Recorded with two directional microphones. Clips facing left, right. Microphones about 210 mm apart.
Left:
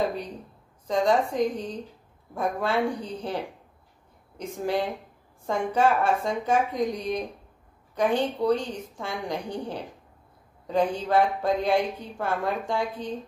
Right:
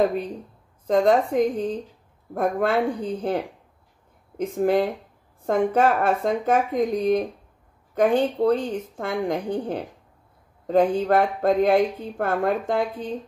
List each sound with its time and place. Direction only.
0.8 s speech: 55° right (ahead or behind)